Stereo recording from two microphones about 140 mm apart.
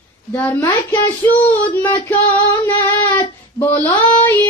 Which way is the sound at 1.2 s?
20° left (ahead or behind).